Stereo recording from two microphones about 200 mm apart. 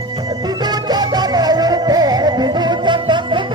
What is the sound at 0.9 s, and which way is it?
Music, 20° right (ahead or behind).